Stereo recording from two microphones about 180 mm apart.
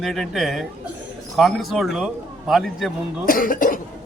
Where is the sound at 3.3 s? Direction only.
50° left (ahead or behind).